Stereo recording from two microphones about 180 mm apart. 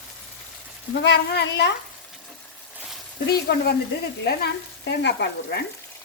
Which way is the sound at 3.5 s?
65° left (ahead or behind).